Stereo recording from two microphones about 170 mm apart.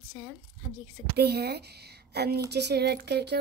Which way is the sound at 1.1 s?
75° right (ahead or behind).